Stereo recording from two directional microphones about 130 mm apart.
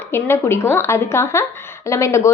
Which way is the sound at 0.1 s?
20° left (ahead or behind).